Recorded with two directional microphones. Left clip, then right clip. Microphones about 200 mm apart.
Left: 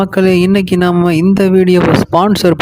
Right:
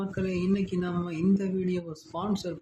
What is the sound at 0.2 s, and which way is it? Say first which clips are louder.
Speech: left 19 dB; 55° left (ahead or behind).